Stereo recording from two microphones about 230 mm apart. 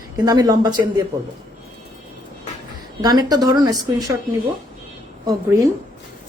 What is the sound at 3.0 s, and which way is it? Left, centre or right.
Speech, centre.